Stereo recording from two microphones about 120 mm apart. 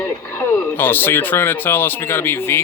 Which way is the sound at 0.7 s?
15° left (ahead or behind).